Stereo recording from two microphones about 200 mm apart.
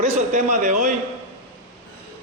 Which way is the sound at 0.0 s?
35° right (ahead or behind).